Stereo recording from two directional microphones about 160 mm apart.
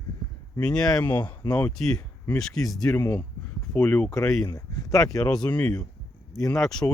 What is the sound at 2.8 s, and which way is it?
Speech, 15° left (ahead or behind).